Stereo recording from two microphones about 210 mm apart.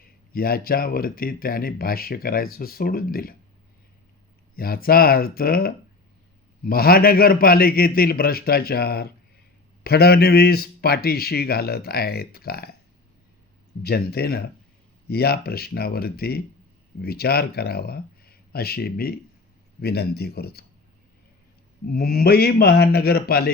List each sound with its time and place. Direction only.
0.0 s speech: 45° left (ahead or behind)
4.5 s speech: 45° left (ahead or behind)
13.8 s speech: 50° left (ahead or behind)
21.9 s speech: 45° left (ahead or behind)